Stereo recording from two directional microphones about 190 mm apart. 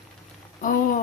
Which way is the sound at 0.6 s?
45° left (ahead or behind).